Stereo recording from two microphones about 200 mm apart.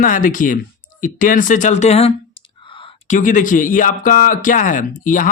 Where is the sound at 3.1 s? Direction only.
40° left (ahead or behind).